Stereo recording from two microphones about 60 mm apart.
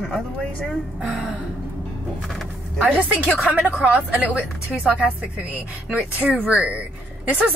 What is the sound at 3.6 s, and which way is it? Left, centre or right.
A woman's voice, right.